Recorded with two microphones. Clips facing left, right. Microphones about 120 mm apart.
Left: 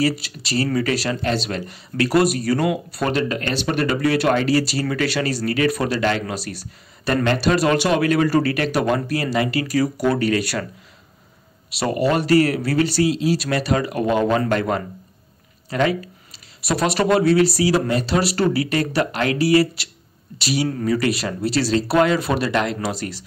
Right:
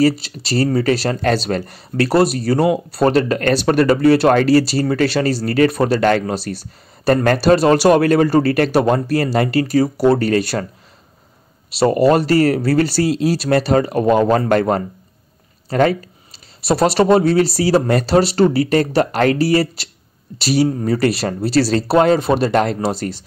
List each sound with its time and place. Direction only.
0.0 s speech: 30° right (ahead or behind)
4.3 s speech: 50° right (ahead or behind)
4.6 s speech: 35° right (ahead or behind)
5.9 s speech: 45° right (ahead or behind)
6.3 s speech: 30° right (ahead or behind)
7.1 s speech: 40° right (ahead or behind)
10.1 s speech: 40° right (ahead or behind)
11.8 s speech: 40° right (ahead or behind)
13.6 s speech: 35° right (ahead or behind)
20.8 s speech: 35° right (ahead or behind)
22.5 s speech: 40° right (ahead or behind)
22.8 s speech: 30° right (ahead or behind)